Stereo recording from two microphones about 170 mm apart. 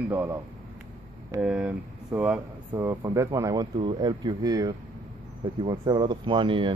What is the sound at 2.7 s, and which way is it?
Speech, 20° right (ahead or behind).